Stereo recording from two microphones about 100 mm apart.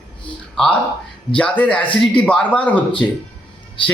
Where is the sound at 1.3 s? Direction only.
15° left (ahead or behind).